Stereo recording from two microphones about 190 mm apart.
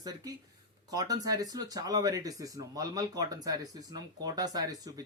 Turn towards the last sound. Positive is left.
turn(degrees=-20)  # may be behind; listen again after turning